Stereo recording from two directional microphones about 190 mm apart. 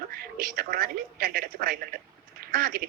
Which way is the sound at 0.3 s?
50° right (ahead or behind).